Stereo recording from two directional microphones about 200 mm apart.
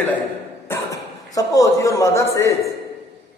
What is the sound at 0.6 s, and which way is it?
A man's voice, 15° left (ahead or behind).